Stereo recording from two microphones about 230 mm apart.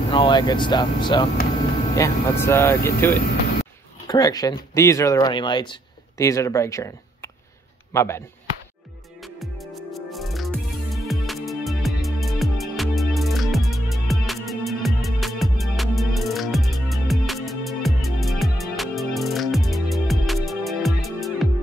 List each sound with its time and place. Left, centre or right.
0.1 s speech: centre
9.2 s music: centre